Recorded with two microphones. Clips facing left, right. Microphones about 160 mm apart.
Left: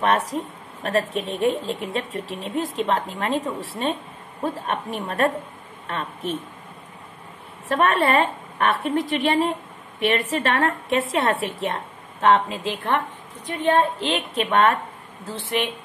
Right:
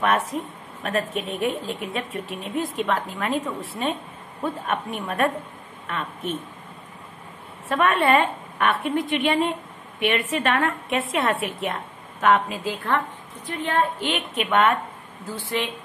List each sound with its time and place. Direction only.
0.0 s speech: 30° left (ahead or behind)
7.6 s a woman's voice: 35° left (ahead or behind)
15.3 s a woman's voice: 20° left (ahead or behind)